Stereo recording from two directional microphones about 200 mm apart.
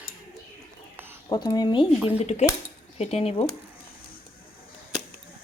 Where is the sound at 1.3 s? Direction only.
20° left (ahead or behind).